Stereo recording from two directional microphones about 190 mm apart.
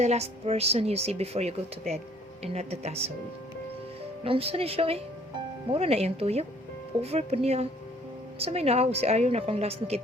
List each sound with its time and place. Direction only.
0.0 s speech: 35° right (ahead or behind)
4.2 s speech: 30° right (ahead or behind)